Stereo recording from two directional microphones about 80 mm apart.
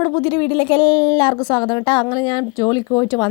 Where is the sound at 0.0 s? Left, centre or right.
Left.